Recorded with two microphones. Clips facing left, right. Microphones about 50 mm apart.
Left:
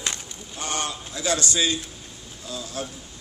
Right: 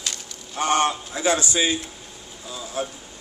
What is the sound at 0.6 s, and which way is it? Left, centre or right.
A man's voice, right.